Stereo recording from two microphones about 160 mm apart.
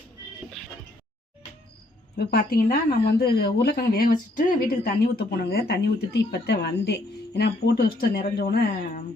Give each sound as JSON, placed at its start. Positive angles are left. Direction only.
{"t": 2.1, "sound": "speech", "side_deg": 70}